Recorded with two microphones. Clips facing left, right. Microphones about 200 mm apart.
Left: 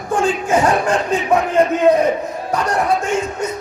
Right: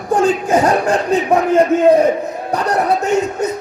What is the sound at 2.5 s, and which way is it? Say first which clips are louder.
Speech: right 2 dB; 35° right (ahead or behind).